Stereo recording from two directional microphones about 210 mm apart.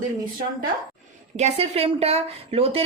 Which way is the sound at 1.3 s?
30° right (ahead or behind).